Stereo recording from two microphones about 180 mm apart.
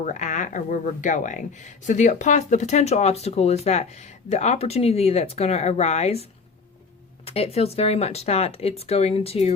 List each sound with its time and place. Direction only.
0.0 s speech: 45° left (ahead or behind)
7.3 s speech: 35° left (ahead or behind)